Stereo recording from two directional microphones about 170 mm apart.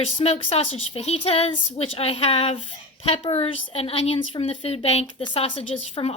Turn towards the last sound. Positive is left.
turn(degrees=35)  # may be behind; listen again after turning